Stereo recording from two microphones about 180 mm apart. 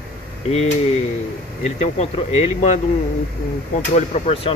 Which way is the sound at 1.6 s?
40° left (ahead or behind).